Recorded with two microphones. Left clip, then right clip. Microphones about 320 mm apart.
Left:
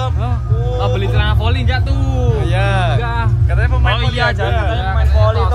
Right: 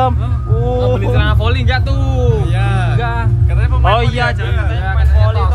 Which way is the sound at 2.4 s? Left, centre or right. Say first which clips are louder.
Left 3 dB; left.